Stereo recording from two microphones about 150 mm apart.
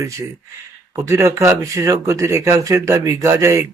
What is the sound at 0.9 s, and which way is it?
Speech, 20° right (ahead or behind).